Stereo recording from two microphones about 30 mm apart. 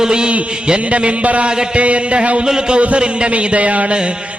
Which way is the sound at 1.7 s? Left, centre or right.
Right.